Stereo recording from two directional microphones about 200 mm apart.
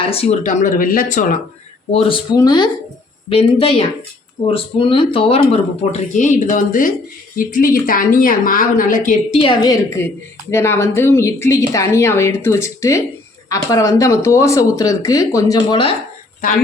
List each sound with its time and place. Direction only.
0.0 s speech: 30° left (ahead or behind)
1.9 s speech: 25° left (ahead or behind)
9.6 s a woman's voice: 15° left (ahead or behind)